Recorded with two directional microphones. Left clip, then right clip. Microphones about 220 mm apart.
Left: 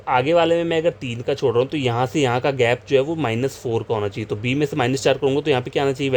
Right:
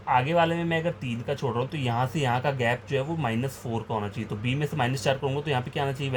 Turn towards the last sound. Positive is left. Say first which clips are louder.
# left 10 dB
turn(degrees=45)  # may be behind; listen again after turning